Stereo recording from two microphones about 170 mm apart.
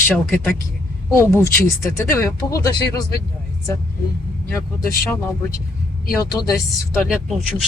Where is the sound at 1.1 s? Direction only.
15° left (ahead or behind).